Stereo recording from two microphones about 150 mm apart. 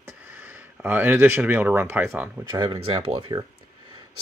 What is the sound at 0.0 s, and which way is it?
Speech, 10° right (ahead or behind).